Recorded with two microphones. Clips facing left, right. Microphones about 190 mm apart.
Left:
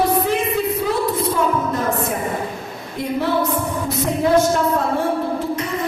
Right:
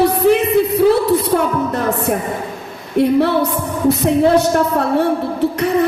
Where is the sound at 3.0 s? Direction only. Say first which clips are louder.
Right 9 dB; 65° right (ahead or behind).